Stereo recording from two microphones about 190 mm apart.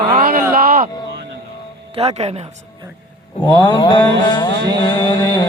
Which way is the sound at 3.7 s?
25° left (ahead or behind).